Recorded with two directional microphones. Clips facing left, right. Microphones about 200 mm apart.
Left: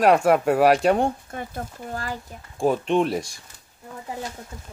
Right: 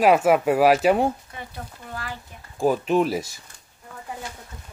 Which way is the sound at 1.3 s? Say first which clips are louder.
Left 5 dB; 50° left (ahead or behind).